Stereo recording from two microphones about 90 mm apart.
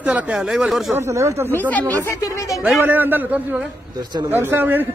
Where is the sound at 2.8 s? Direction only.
20° right (ahead or behind).